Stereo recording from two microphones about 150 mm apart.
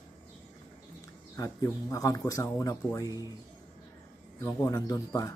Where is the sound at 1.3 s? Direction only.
20° left (ahead or behind).